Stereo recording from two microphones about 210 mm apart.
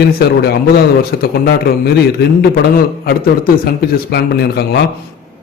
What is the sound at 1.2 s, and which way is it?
A man's voice, 50° left (ahead or behind).